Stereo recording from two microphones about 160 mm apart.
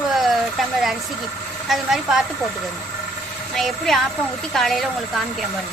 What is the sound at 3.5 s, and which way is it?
Speech, centre (ahead or behind).